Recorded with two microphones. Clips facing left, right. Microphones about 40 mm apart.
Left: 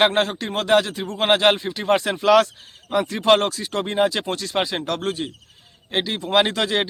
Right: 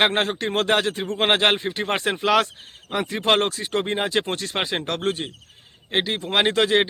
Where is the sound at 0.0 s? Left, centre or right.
Right.